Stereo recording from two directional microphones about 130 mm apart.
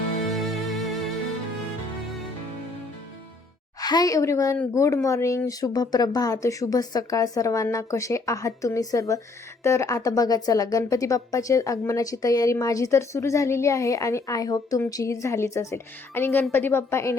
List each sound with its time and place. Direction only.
0.3 s music: centre (ahead or behind)
3.8 s a woman's voice: 30° left (ahead or behind)